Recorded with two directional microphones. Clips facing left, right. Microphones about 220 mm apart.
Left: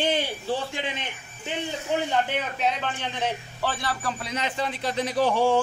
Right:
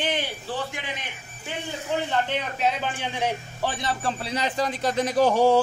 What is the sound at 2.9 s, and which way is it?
A man's voice, 10° right (ahead or behind).